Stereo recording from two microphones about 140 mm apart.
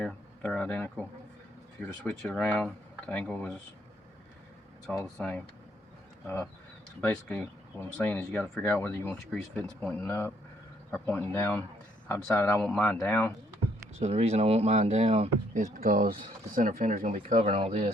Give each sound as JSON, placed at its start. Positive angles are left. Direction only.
{"t": 0.0, "sound": "speech", "side_deg": 10}
{"t": 2.0, "sound": "speech", "side_deg": 5}
{"t": 4.9, "sound": "speech", "side_deg": 5}
{"t": 6.2, "sound": "speech", "side_deg": 15}
{"t": 12.6, "sound": "speech", "side_deg": 5}
{"t": 14.0, "sound": "speech", "side_deg": -50}
{"t": 15.5, "sound": "speech", "side_deg": -65}
{"t": 16.6, "sound": "speech", "side_deg": -65}
{"t": 17.4, "sound": "speech", "side_deg": -50}